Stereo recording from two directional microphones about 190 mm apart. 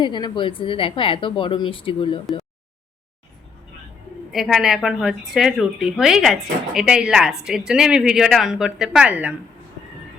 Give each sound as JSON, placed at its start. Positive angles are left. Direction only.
{"t": 0.0, "sound": "a woman's voice", "side_deg": 25}
{"t": 4.3, "sound": "a woman's voice", "side_deg": 0}